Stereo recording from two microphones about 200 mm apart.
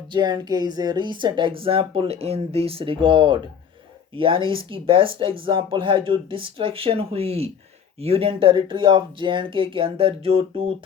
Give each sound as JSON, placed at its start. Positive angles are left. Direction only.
{"t": 0.1, "sound": "speech", "side_deg": -20}